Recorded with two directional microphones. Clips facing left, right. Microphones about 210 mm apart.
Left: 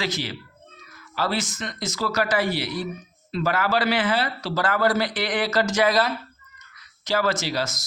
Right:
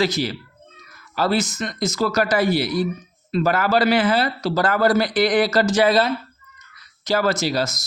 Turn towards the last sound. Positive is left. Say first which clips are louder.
# right 5 dB
turn(degrees=-40)  # may be behind; listen again after turning